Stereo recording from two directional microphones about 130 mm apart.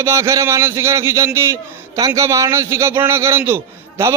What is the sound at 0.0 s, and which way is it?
A man's voice, 20° right (ahead or behind).